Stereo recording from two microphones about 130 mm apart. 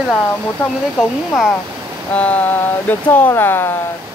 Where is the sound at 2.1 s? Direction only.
10° left (ahead or behind).